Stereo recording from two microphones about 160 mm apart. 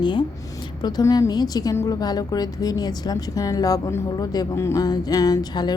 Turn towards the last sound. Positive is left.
turn(degrees=25)  # may be behind; listen again after turning